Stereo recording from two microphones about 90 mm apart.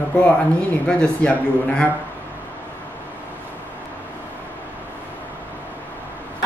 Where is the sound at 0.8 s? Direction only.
10° left (ahead or behind).